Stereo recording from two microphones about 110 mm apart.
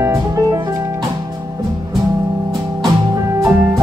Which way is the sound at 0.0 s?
25° right (ahead or behind).